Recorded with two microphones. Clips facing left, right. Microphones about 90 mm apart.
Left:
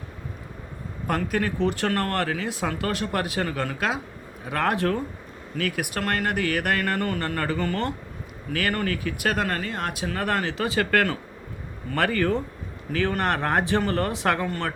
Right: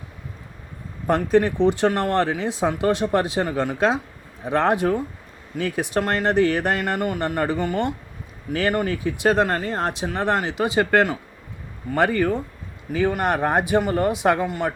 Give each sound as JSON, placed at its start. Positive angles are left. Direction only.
{"t": 1.0, "sound": "speech", "side_deg": -25}